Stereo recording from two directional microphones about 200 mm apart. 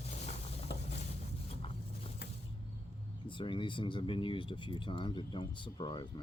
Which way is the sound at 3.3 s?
25° left (ahead or behind).